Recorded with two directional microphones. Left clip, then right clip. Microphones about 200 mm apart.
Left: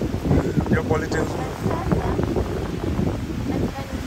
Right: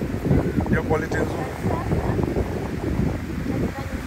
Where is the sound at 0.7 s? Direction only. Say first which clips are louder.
Even; 5° left (ahead or behind).